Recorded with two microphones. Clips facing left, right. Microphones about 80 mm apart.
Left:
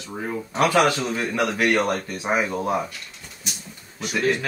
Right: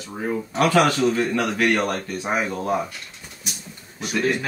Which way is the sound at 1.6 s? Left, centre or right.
Centre.